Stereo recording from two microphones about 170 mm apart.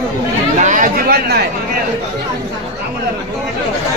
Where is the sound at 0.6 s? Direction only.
50° right (ahead or behind).